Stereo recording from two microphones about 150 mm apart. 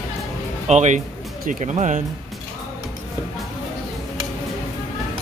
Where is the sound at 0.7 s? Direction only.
50° right (ahead or behind).